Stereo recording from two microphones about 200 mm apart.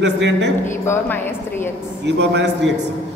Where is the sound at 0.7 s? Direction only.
10° left (ahead or behind).